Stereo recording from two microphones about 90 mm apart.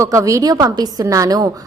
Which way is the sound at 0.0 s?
35° right (ahead or behind).